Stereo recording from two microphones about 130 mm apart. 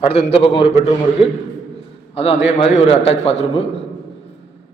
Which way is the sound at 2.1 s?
50° left (ahead or behind).